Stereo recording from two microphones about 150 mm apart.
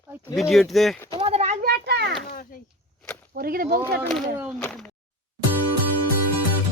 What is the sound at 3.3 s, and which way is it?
Speech, 80° right.